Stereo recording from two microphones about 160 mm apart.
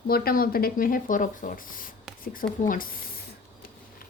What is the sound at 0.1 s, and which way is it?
A woman's voice, 65° left (ahead or behind).